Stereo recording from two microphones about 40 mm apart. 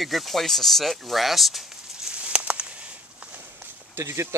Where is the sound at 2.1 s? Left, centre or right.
Right.